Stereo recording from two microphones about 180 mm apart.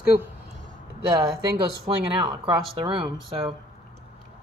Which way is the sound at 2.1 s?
25° right (ahead or behind).